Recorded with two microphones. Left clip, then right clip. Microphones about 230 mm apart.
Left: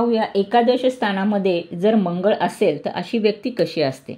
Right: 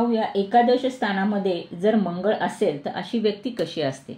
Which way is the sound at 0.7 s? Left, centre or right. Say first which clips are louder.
Left 3 dB; left.